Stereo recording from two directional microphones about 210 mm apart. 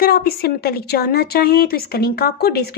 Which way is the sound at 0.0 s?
45° left (ahead or behind).